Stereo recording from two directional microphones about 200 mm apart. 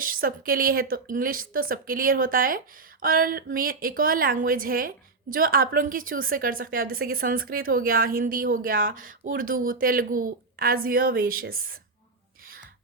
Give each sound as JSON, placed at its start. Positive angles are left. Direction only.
{"t": 0.0, "sound": "a woman's voice", "side_deg": -45}